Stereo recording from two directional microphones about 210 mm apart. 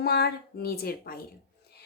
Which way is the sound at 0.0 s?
50° left (ahead or behind).